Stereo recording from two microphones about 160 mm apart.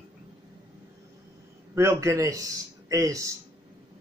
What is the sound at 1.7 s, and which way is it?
A man's voice, 20° right (ahead or behind).